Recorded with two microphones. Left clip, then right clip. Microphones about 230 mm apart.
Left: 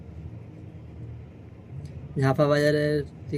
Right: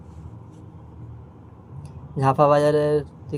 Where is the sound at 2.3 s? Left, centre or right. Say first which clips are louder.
Right 5 dB; centre.